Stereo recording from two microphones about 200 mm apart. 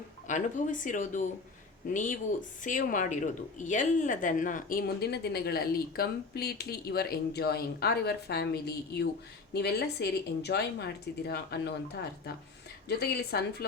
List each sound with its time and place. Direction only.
0.3 s a woman's voice: 40° left (ahead or behind); by 11.7 s 55° left (ahead or behind)
12.9 s a woman's voice: 55° left (ahead or behind)